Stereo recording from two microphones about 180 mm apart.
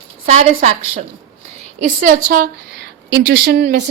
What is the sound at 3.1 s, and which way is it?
Speech, 60° right (ahead or behind).